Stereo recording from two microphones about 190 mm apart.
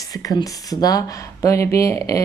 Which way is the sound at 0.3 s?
20° left (ahead or behind).